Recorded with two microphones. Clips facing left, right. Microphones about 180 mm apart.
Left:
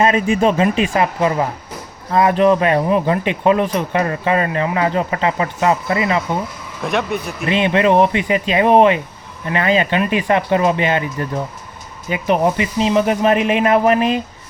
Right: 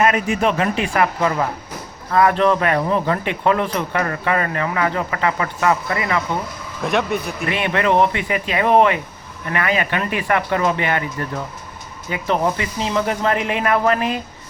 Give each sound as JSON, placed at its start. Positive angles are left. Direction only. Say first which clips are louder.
{"t": 0.0, "sound": "speech", "louder": "left 3 dB", "side_deg": 25}
{"t": 6.8, "sound": "a man's voice", "louder": "even", "side_deg": 0}
{"t": 7.4, "sound": "speech", "louder": "left 6 dB", "side_deg": 20}